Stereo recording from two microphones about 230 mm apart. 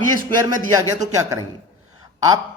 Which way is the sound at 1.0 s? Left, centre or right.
Centre.